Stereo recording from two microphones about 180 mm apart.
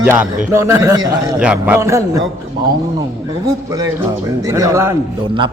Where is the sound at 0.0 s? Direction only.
10° right (ahead or behind).